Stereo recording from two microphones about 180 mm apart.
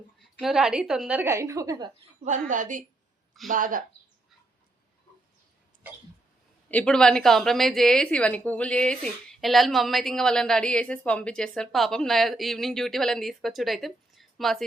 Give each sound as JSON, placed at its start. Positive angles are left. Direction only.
{"t": 0.3, "sound": "a woman's voice", "side_deg": -5}
{"t": 2.2, "sound": "a woman's voice", "side_deg": -45}
{"t": 6.7, "sound": "a woman's voice", "side_deg": 5}